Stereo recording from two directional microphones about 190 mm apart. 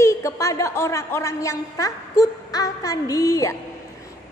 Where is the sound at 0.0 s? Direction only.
15° left (ahead or behind).